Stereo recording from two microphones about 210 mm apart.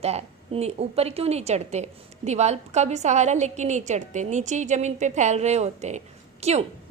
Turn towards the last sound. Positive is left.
turn(degrees=-30)  # may be behind; listen again after turning